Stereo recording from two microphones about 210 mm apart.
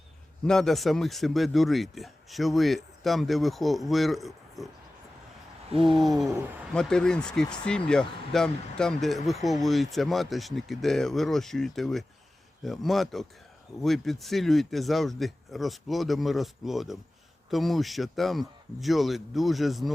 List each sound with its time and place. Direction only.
0.4 s speech: centre (ahead or behind)
6.0 s speech: centre (ahead or behind)